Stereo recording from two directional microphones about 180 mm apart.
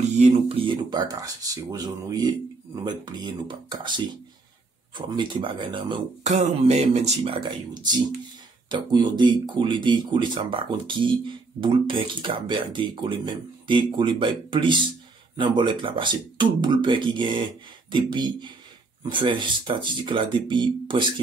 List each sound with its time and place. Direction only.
0.2 s speech: 35° right (ahead or behind)
6.2 s speech: 40° right (ahead or behind)